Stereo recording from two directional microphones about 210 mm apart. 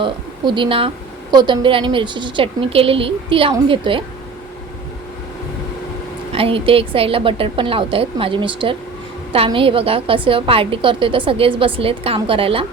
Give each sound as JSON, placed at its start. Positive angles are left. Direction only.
{"t": 0.0, "sound": "a woman's voice", "side_deg": -25}
{"t": 6.3, "sound": "a woman's voice", "side_deg": -25}